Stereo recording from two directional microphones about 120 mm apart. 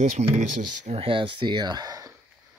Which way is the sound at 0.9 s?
45° right (ahead or behind).